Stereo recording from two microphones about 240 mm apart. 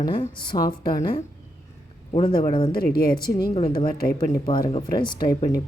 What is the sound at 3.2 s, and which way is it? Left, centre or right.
Speech, centre.